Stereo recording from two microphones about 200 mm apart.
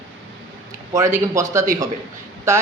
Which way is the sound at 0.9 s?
15° right (ahead or behind).